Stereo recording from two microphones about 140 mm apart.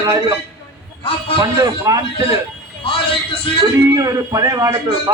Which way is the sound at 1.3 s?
25° right (ahead or behind).